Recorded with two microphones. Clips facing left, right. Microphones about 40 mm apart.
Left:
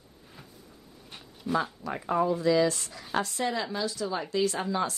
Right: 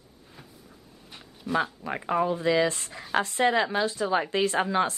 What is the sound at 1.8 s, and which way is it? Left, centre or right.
A woman's voice, right.